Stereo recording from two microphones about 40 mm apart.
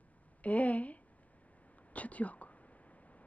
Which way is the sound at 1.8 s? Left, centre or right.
Left.